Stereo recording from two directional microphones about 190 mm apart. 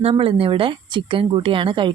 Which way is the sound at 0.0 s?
30° right (ahead or behind).